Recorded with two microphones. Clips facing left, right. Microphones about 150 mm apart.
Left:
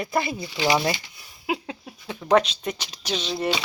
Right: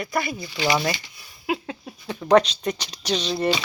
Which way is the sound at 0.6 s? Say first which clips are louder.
Left 1 dB; 15° left (ahead or behind).